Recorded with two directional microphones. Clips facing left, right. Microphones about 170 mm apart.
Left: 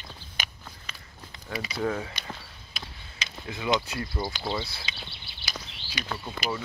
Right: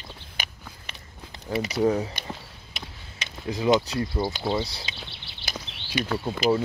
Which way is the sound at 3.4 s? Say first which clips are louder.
Right 6 dB; 40° right (ahead or behind).